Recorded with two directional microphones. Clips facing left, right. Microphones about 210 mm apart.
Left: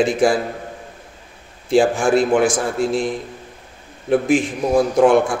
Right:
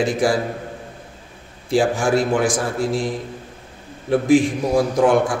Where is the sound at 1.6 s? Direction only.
25° left (ahead or behind).